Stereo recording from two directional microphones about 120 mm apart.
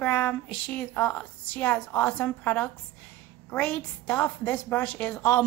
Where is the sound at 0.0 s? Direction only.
15° left (ahead or behind).